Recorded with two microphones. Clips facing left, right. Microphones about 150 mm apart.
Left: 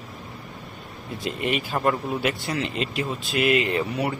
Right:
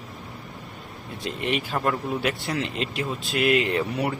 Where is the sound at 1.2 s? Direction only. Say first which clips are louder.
Left 1 dB; 5° left (ahead or behind).